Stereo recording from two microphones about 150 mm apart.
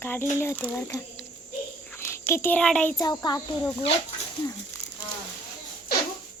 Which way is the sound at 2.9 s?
25° left (ahead or behind).